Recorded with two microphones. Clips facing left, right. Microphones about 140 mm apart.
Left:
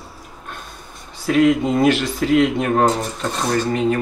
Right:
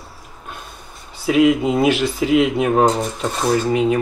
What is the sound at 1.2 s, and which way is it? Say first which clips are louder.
Speech: right 1 dB; 5° right (ahead or behind).